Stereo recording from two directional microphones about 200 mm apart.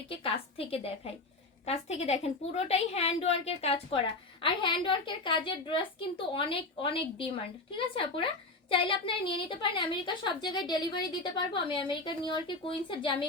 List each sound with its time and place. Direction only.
0.1 s a woman's voice: 25° left (ahead or behind)